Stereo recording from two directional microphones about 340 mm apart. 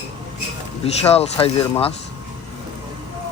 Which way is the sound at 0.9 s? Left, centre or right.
Centre.